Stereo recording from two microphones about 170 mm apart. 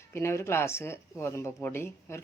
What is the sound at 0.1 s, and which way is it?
A woman's voice, 15° left (ahead or behind).